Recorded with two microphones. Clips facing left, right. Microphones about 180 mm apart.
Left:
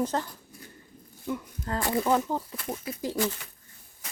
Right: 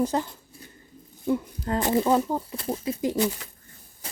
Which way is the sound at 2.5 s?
30° right (ahead or behind).